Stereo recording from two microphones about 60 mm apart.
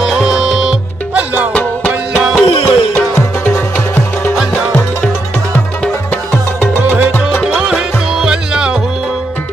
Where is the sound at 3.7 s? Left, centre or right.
Left.